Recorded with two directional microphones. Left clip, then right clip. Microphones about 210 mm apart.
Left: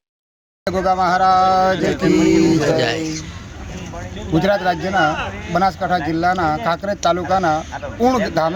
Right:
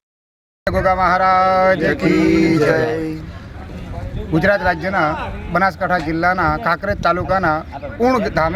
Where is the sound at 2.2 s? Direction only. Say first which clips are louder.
Right 2 dB; 5° right (ahead or behind).